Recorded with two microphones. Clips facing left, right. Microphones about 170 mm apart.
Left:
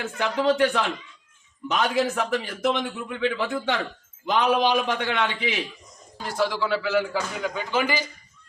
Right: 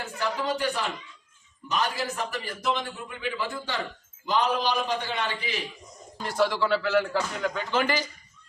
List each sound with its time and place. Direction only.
0.0 s a man's voice: 90° left
2.6 s a man's voice: 70° left (ahead or behind); by 5.5 s 90° left
6.2 s a man's voice: 5° left (ahead or behind)